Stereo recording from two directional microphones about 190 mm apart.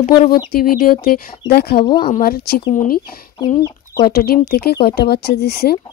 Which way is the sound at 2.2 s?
50° left (ahead or behind).